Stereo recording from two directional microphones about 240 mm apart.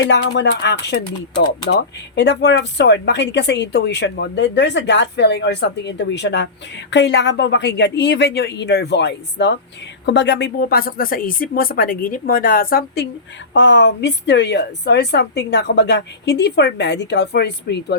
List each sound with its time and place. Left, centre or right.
0.1 s speech: left
2.1 s speech: left